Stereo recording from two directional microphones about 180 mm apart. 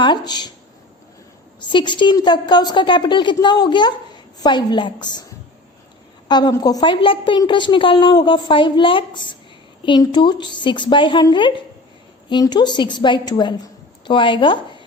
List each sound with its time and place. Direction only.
0.0 s a woman's voice: 25° left (ahead or behind)
1.7 s a woman's voice: 25° left (ahead or behind)
6.2 s a woman's voice: 25° left (ahead or behind)